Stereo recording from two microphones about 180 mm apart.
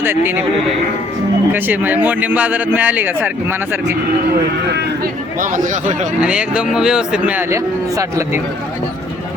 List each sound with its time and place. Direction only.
0.0 s speech: 10° right (ahead or behind)
1.5 s speech: 10° right (ahead or behind)
5.4 s speech: 45° right (ahead or behind)
6.1 s speech: 5° right (ahead or behind)